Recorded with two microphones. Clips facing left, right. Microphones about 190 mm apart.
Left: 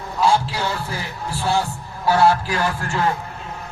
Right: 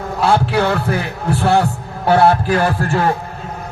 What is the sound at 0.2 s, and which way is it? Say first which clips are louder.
A man's voice: right 4 dB; 60° right (ahead or behind).